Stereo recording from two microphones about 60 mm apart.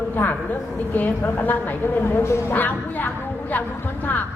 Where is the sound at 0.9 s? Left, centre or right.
Left.